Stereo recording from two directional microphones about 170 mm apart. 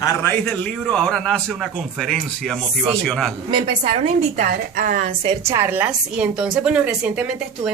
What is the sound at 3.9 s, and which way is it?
A woman's voice, 55° right (ahead or behind).